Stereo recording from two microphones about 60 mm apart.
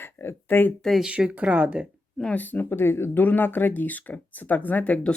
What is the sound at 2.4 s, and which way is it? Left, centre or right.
Speech, left.